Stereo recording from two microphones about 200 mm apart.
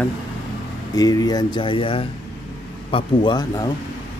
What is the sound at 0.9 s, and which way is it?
Speech, 20° left (ahead or behind).